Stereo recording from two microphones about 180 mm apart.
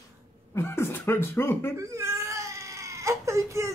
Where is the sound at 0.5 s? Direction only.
15° left (ahead or behind).